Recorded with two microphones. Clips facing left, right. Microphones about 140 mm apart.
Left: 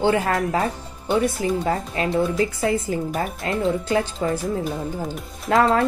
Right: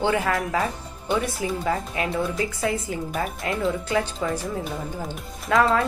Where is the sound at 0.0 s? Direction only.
30° left (ahead or behind).